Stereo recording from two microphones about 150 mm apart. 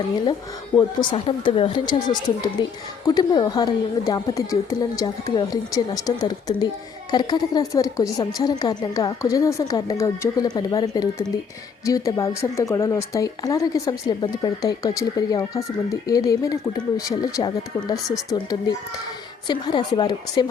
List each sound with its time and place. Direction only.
0.8 s speech: 30° left (ahead or behind)
19.5 s speech: 30° left (ahead or behind)